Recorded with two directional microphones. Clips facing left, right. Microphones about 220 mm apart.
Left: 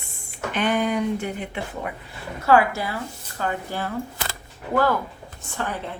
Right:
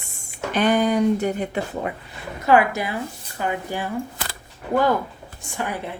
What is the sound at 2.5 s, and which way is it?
A woman's voice, 20° right (ahead or behind).